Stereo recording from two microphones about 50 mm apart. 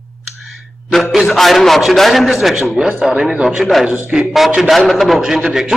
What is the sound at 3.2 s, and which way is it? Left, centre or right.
Speech, centre.